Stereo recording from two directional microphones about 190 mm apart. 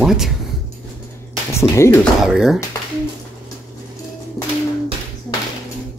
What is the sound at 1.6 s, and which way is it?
Speech, 15° left (ahead or behind).